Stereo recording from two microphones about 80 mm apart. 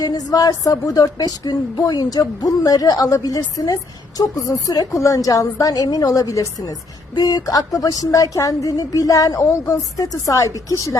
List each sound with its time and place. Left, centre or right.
0.0 s speech: left
7.2 s speech: left